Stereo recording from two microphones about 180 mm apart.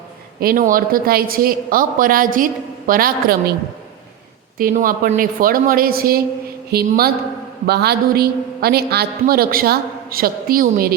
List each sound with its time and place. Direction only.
0.3 s a woman's voice: 50° right (ahead or behind)
4.5 s a woman's voice: 50° right (ahead or behind)